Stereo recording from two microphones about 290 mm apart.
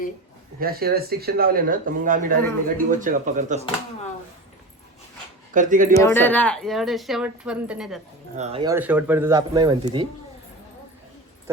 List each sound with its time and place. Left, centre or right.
0.6 s speech: right
5.5 s speech: right
6.0 s a woman's voice: centre
8.4 s speech: right
8.7 s speech: centre